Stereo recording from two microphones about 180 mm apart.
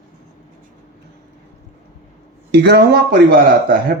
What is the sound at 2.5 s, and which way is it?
Speech, 70° right (ahead or behind).